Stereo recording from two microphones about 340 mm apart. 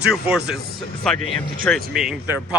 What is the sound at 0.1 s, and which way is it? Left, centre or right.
Speech, centre.